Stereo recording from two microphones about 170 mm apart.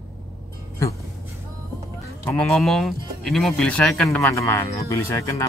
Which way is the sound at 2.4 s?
Centre (ahead or behind).